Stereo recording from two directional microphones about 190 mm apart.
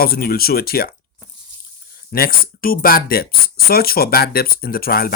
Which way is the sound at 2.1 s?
50° left (ahead or behind).